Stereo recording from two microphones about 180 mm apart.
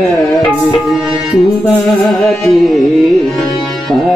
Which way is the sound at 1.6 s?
Centre (ahead or behind).